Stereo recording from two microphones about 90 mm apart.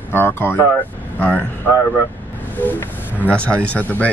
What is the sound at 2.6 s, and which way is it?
Speech, 20° left (ahead or behind).